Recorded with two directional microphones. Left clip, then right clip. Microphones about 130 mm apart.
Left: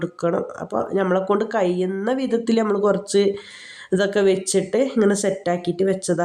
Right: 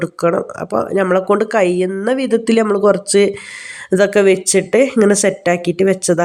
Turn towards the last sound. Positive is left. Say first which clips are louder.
# right 7 dB
turn(degrees=-25)  # may be behind; listen again after turning